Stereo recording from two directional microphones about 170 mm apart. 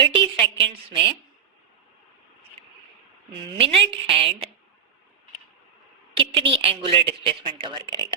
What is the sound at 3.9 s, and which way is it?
Speech, 30° right (ahead or behind).